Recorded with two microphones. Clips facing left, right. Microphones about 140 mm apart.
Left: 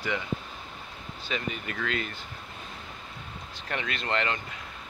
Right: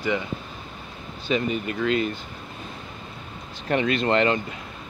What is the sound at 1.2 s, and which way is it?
Speech, 15° right (ahead or behind).